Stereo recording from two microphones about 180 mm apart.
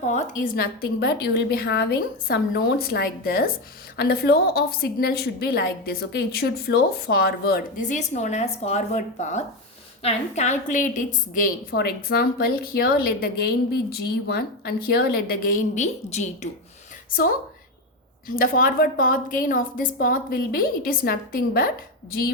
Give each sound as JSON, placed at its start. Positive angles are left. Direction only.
{"t": 0.1, "sound": "a woman's voice", "side_deg": 45}
{"t": 17.1, "sound": "a woman's voice", "side_deg": 55}
{"t": 18.3, "sound": "a woman's voice", "side_deg": 50}